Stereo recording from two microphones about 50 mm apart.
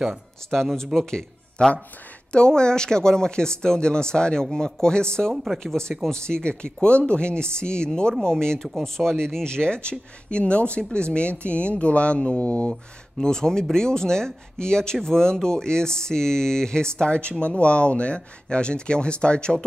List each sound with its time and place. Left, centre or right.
0.5 s a man's voice: centre; by 12.7 s left
13.2 s speech: centre